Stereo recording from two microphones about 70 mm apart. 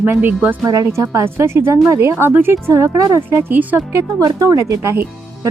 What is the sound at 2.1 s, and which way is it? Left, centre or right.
A woman's voice, right.